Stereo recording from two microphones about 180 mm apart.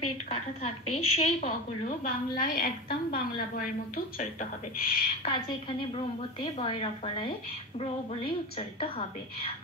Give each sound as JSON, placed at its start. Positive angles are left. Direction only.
{"t": 0.3, "sound": "a woman's voice", "side_deg": 35}
{"t": 5.9, "sound": "speech", "side_deg": 30}
{"t": 8.5, "sound": "a woman's voice", "side_deg": 30}